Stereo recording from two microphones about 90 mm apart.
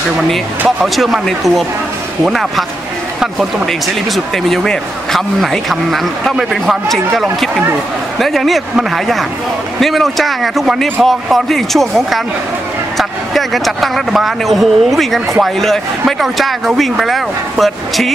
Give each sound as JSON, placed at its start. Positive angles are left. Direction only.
{"t": 0.7, "sound": "a man's voice", "side_deg": 0}